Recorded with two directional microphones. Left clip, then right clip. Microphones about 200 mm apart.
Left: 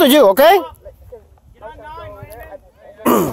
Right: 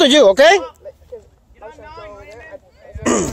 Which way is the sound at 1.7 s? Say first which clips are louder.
Left 2 dB; 40° left (ahead or behind).